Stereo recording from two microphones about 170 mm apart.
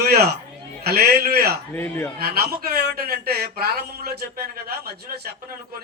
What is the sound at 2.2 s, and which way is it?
A man's voice, 65° right (ahead or behind).